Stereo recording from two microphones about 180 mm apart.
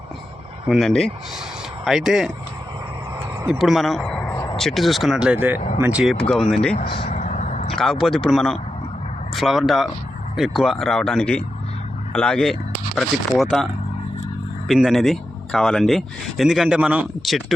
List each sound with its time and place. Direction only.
0.7 s speech: centre (ahead or behind)
3.4 s speech: 5° right (ahead or behind)
6.1 s speech: 5° left (ahead or behind)
7.1 s vehicle: 45° left (ahead or behind)
7.7 s speech: centre (ahead or behind)
14.7 s speech: centre (ahead or behind)